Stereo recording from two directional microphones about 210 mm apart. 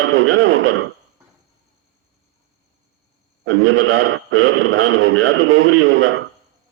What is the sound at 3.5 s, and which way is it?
A man's voice, 70° right (ahead or behind).